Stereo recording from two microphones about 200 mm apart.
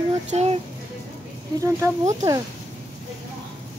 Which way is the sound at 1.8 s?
15° right (ahead or behind).